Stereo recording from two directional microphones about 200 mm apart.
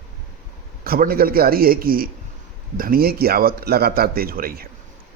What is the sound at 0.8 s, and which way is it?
Speech, 50° right (ahead or behind).